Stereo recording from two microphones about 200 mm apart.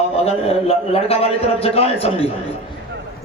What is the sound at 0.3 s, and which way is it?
A man's voice, 30° left (ahead or behind).